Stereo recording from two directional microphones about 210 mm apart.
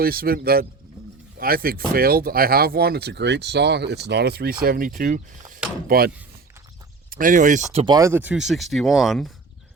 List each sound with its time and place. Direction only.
0.0 s speech: 45° right (ahead or behind)
7.1 s speech: 40° right (ahead or behind)
7.9 s speech: 15° right (ahead or behind)